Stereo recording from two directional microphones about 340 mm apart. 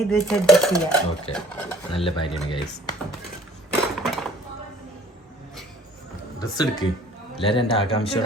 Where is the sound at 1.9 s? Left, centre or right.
Centre.